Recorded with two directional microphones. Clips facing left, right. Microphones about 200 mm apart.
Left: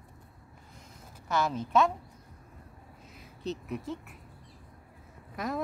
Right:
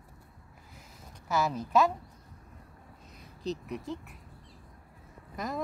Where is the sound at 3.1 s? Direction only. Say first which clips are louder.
Right 1 dB; centre (ahead or behind).